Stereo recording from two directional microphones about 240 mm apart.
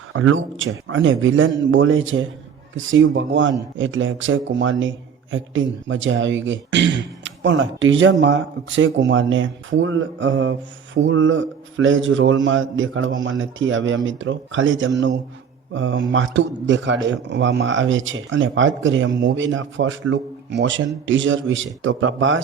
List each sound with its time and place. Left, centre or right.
0.1 s a man's voice: right